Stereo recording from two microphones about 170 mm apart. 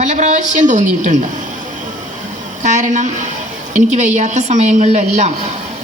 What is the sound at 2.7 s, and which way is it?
Speech, 45° right (ahead or behind).